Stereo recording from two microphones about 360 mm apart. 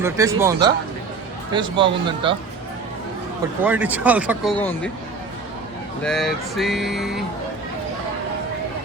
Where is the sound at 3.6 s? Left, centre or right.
Centre.